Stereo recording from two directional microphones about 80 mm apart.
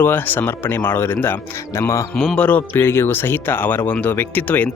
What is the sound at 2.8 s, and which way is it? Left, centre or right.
Speech, left.